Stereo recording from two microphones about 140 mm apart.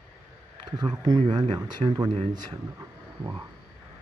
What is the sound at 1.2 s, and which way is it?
Speech, 45° right (ahead or behind).